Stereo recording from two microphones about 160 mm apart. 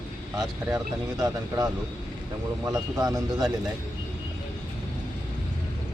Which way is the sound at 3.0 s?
25° right (ahead or behind).